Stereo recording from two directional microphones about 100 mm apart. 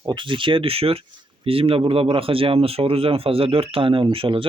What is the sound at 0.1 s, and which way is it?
Speech, 55° right (ahead or behind).